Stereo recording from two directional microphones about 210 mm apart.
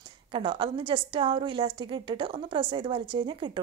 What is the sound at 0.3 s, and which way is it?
A woman's voice, 25° right (ahead or behind).